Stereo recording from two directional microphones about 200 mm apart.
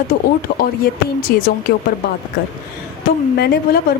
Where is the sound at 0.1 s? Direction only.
50° left (ahead or behind).